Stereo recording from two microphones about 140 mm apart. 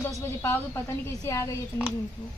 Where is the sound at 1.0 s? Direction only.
20° left (ahead or behind).